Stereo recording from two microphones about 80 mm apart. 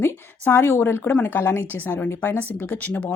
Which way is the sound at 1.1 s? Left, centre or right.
Centre.